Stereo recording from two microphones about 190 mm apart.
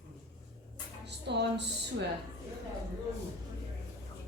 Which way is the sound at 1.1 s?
65° right (ahead or behind).